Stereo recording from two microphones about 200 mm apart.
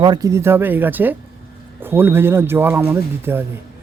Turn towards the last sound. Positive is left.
turn(degrees=-10)  # may be behind; listen again after turning